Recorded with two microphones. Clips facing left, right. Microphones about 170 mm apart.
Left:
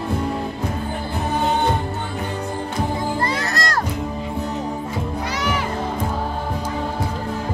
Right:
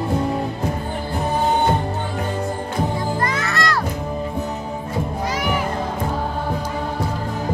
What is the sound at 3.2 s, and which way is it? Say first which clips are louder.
Music: right 1 dB; 35° left (ahead or behind).